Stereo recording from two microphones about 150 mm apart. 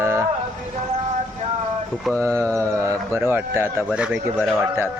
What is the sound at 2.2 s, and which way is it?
Speech, 20° right (ahead or behind).